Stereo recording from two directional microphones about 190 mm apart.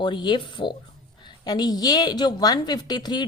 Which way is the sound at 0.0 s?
25° left (ahead or behind).